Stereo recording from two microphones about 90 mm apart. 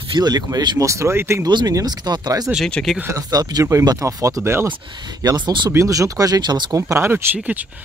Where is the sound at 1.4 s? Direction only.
50° right (ahead or behind).